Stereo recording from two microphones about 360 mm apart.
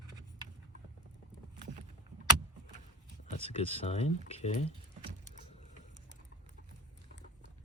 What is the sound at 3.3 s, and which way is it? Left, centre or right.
Speech, centre.